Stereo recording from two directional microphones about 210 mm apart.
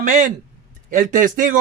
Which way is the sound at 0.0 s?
35° right (ahead or behind).